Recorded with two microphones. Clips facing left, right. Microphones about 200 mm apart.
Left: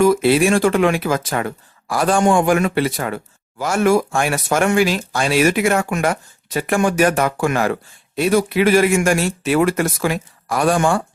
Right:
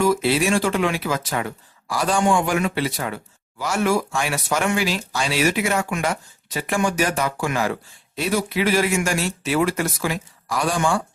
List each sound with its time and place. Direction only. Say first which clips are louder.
0.0 s speech: left 5 dB; 55° left (ahead or behind)